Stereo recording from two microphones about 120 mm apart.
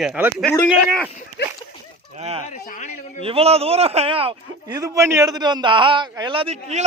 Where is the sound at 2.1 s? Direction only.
60° right (ahead or behind).